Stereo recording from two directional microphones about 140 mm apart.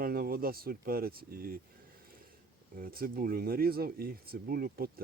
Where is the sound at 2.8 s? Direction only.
90° right.